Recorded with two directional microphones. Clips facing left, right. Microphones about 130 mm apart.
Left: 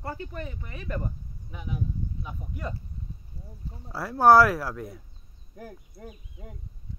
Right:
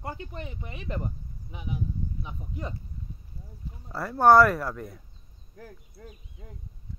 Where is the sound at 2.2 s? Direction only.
20° right (ahead or behind).